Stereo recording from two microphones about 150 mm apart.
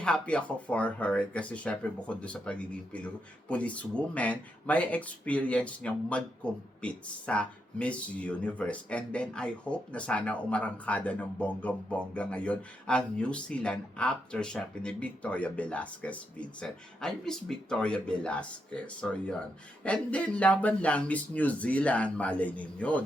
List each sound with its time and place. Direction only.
0.0 s speech: 5° left (ahead or behind)